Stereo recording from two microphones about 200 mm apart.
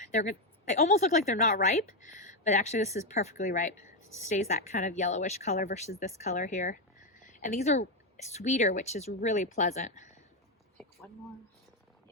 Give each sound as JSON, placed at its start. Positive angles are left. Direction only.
{"t": 0.0, "sound": "speech", "side_deg": 35}